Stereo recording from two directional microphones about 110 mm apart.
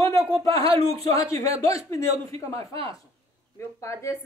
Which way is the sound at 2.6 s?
60° right (ahead or behind).